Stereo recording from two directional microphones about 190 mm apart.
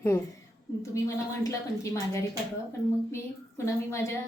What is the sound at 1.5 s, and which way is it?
Speech, 15° left (ahead or behind).